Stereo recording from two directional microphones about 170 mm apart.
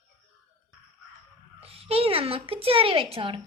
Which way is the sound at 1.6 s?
35° right (ahead or behind).